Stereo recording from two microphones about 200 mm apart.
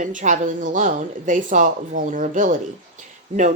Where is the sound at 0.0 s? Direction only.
40° right (ahead or behind).